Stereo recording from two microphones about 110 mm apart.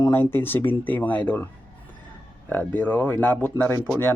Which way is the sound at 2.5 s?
15° left (ahead or behind).